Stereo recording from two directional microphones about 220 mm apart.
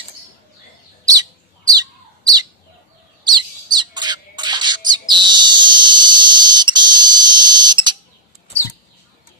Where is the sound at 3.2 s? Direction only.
20° right (ahead or behind).